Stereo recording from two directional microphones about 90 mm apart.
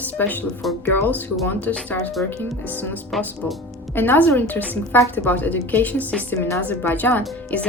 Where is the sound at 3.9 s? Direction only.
20° left (ahead or behind).